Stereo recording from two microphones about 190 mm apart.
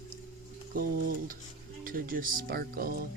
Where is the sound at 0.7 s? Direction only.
45° right (ahead or behind).